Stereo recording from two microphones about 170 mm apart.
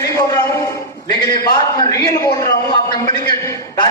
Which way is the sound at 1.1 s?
20° left (ahead or behind).